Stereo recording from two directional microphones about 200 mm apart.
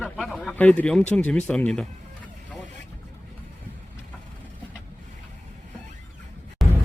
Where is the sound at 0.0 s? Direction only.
Centre (ahead or behind).